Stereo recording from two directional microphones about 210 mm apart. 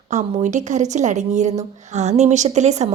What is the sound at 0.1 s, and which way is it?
A woman's voice, 35° right (ahead or behind).